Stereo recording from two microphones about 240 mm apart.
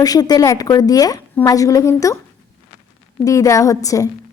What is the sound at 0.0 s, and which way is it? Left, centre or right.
A woman's voice, centre.